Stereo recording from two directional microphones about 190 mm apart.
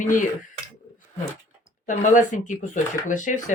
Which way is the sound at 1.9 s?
40° left (ahead or behind).